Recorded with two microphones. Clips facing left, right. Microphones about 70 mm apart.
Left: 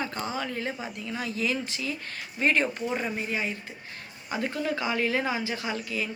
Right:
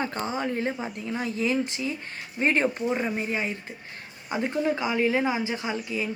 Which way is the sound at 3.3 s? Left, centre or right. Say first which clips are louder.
Right 2 dB; right.